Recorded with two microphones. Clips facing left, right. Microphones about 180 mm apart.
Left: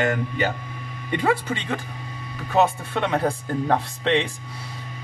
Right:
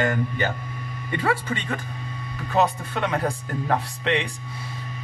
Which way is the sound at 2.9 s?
25° left (ahead or behind).